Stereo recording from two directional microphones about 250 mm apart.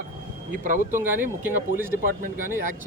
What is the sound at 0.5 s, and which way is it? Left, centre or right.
Speech, right.